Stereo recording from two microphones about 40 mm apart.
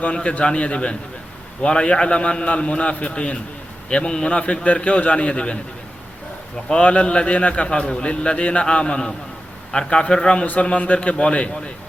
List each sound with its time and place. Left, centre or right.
0.0 s a man's voice: left
6.8 s a man's voice: left
10.4 s a man's voice: left
10.7 s a man's voice: left